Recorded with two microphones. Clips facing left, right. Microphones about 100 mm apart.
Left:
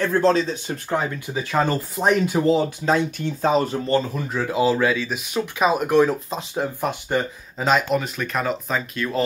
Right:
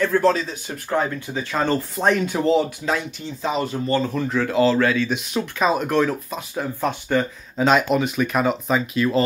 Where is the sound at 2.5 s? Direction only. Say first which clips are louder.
Left 1 dB; 35° left (ahead or behind).